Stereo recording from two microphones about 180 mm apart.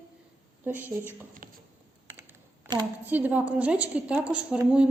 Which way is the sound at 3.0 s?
10° right (ahead or behind).